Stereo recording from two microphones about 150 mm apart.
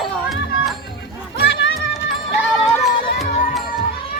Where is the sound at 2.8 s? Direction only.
Centre (ahead or behind).